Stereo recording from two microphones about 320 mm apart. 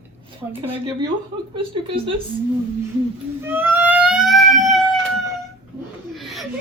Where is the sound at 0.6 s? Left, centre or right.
Centre.